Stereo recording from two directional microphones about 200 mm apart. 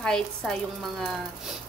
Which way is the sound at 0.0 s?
5° left (ahead or behind).